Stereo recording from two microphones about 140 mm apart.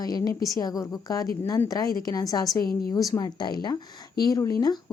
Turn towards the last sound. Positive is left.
turn(degrees=25)  # may be behind; listen again after turning